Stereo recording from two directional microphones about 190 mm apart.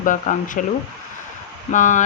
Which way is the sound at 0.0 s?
45° left (ahead or behind).